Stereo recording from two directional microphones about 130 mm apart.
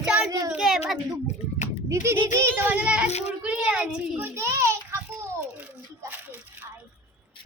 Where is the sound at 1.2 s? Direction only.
65° left (ahead or behind).